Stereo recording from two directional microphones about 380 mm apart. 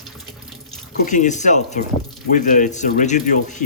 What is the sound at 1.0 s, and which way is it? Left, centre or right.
Speech, centre.